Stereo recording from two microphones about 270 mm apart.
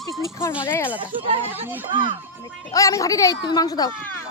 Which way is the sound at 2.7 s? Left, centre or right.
Centre.